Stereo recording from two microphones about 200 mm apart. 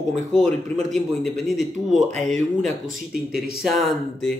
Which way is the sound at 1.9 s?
35° right (ahead or behind).